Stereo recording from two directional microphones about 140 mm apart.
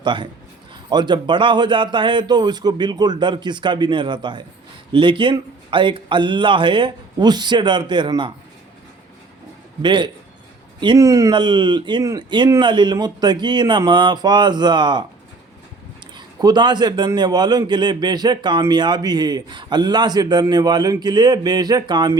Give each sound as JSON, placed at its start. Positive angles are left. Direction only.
{"t": 0.0, "sound": "a man's voice", "side_deg": -35}
{"t": 9.8, "sound": "a man's voice", "side_deg": -35}
{"t": 16.1, "sound": "a man's voice", "side_deg": -30}